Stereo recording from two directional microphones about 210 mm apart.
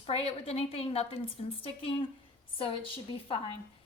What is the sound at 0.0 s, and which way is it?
A woman's voice, 30° left (ahead or behind).